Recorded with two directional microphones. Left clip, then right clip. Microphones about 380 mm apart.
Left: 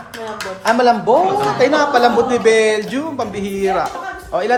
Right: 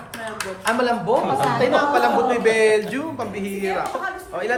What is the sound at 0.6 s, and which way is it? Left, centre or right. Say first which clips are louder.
Speech: left 7 dB; centre.